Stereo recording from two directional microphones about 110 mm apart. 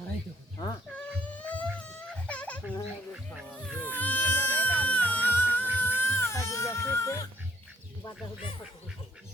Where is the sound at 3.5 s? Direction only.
10° left (ahead or behind).